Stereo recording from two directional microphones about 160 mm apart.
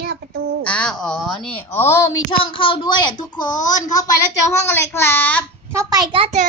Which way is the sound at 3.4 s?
50° left (ahead or behind).